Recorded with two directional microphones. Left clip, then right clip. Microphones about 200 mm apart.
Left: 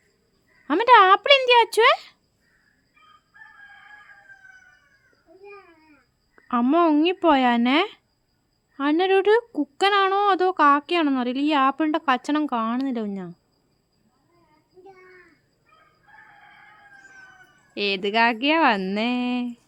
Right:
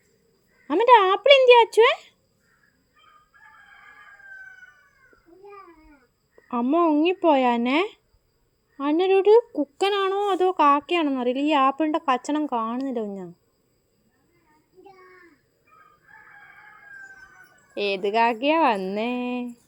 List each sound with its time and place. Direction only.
0.7 s a sound: 30° left (ahead or behind)
1.1 s speech: 30° left (ahead or behind)
6.5 s speech: 30° left (ahead or behind)
17.7 s speech: 25° left (ahead or behind)